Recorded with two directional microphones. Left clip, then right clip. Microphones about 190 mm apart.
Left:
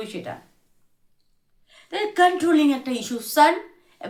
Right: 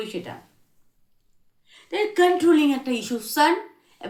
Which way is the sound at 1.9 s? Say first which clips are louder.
Left 1 dB; 10° left (ahead or behind).